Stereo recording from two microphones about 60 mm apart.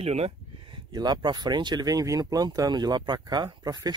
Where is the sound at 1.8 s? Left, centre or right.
Right.